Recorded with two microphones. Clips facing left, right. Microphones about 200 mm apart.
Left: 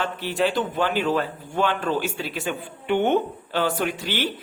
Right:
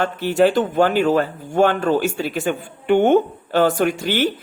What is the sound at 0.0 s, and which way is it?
A woman's voice, 45° right (ahead or behind).